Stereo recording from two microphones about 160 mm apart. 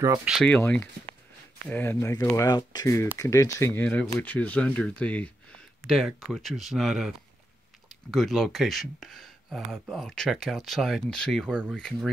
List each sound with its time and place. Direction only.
0.2 s speech: 5° right (ahead or behind)
0.5 s speech: 10° left (ahead or behind)